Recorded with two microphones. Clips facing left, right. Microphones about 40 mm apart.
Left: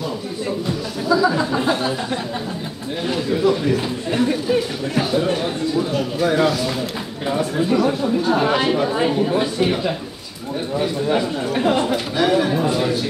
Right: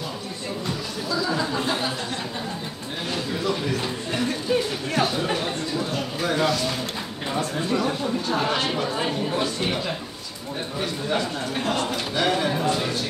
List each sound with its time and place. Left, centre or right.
1.0 s speech: centre
3.1 s speech: centre
12.2 s speech: centre